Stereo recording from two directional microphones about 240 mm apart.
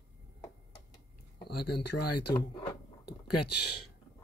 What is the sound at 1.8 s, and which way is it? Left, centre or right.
Speech, left.